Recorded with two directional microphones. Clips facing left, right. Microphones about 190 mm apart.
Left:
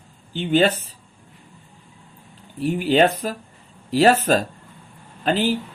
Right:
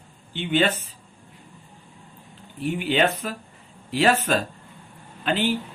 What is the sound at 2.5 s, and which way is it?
Speech, 40° left (ahead or behind).